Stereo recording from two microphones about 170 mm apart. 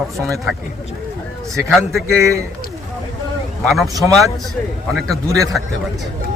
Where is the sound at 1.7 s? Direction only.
Centre (ahead or behind).